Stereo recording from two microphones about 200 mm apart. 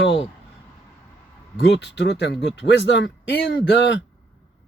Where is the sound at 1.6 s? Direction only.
60° left (ahead or behind).